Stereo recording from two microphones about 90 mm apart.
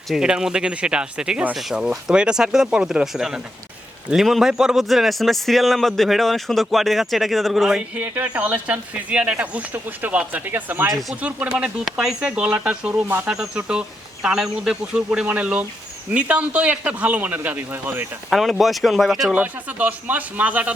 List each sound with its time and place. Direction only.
0.1 s a man's voice: 10° right (ahead or behind)
7.9 s speech: 15° right (ahead or behind)
13.2 s speech: 5° right (ahead or behind); by 18.0 s 20° right (ahead or behind)
18.3 s a man's voice: centre (ahead or behind)
19.3 s speech: 15° right (ahead or behind)